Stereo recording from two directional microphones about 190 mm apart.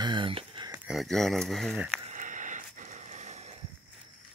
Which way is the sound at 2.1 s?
40° right (ahead or behind).